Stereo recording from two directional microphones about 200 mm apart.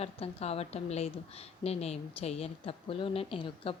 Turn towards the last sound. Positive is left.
turn(degrees=25)  # may be behind; listen again after turning